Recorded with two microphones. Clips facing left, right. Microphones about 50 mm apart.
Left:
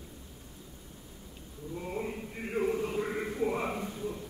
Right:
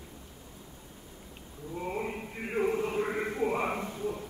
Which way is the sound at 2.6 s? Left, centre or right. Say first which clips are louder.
Right 2 dB; right.